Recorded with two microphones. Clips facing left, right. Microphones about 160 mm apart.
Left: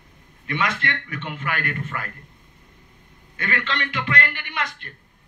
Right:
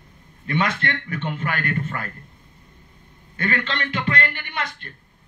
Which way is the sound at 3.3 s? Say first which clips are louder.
Right 2 dB; 35° right (ahead or behind).